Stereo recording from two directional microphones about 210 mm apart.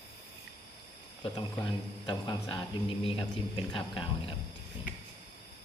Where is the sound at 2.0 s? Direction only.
20° left (ahead or behind).